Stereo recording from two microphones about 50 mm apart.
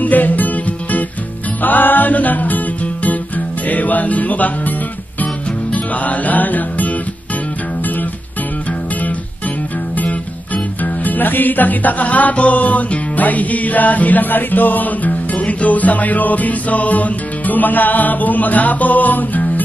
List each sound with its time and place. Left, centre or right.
0.0 s music: left
1.6 s music: left
10.8 s music: left